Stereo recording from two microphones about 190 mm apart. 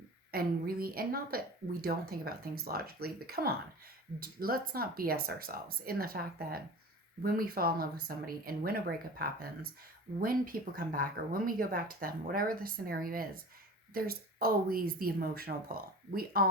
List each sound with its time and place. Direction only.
0.3 s speech: 50° right (ahead or behind)